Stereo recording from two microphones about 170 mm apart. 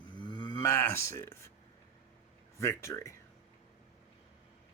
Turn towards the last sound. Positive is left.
turn(degrees=15)  # may be behind; listen again after turning